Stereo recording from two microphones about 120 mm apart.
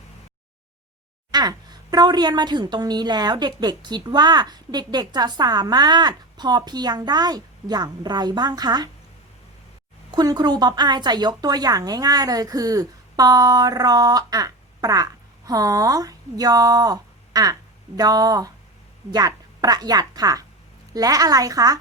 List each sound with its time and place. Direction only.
1.3 s a woman's voice: 35° right (ahead or behind)
10.2 s a woman's voice: 35° right (ahead or behind)